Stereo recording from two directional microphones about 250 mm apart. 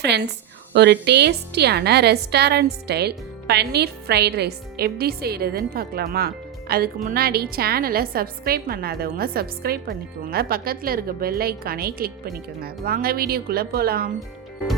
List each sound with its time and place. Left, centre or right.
0.0 s a woman's voice: right